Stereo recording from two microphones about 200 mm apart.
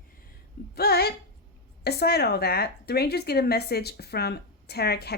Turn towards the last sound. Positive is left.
turn(degrees=55)  # may be behind; listen again after turning